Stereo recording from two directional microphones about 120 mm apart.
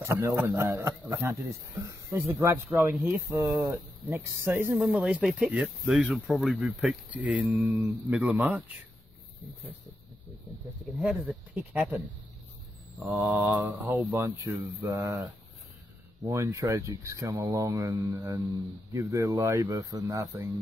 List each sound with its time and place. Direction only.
0.0 s a man's voice: 25° right (ahead or behind)
3.3 s a man's voice: 25° right (ahead or behind)
4.7 s speech: 5° right (ahead or behind)
11.0 s speech: 5° right (ahead or behind)
13.0 s a man's voice: 20° right (ahead or behind)
16.3 s a man's voice: 25° right (ahead or behind)